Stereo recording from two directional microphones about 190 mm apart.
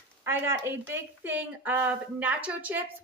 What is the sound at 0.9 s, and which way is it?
A woman's voice, 10° right (ahead or behind).